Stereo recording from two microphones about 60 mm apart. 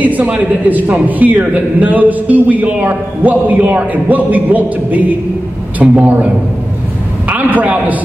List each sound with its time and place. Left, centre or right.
0.0 s a man's voice: right